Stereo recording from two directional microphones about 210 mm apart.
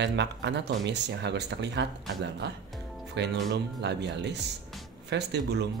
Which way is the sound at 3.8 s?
55° right (ahead or behind).